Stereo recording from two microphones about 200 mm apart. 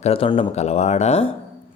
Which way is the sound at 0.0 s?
30° left (ahead or behind).